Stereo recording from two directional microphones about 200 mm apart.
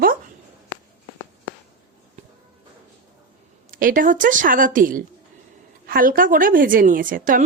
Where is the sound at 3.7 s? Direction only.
45° right (ahead or behind).